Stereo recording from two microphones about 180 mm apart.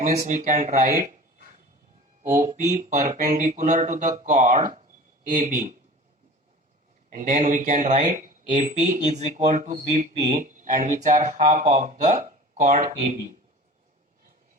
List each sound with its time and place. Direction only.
0.0 s speech: 40° right (ahead or behind)
2.4 s speech: 45° right (ahead or behind)
7.1 s speech: 45° right (ahead or behind)